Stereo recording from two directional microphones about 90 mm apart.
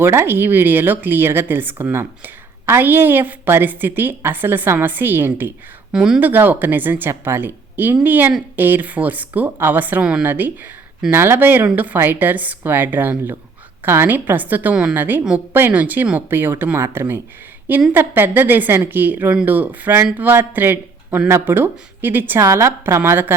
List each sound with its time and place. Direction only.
0.0 s speech: 25° right (ahead or behind)
5.9 s speech: 10° right (ahead or behind)
6.1 s speech: 20° right (ahead or behind)
10.2 s a man's voice: 20° right (ahead or behind)
22.4 s a woman's voice: 30° right (ahead or behind)